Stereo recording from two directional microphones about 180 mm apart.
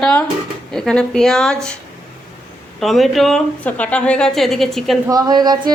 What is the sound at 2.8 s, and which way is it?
A woman's voice, centre (ahead or behind).